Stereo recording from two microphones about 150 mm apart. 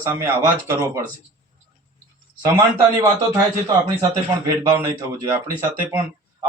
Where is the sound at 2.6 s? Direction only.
20° right (ahead or behind).